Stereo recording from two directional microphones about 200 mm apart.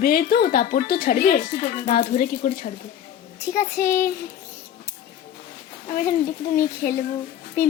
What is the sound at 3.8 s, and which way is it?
Speech, 50° left (ahead or behind).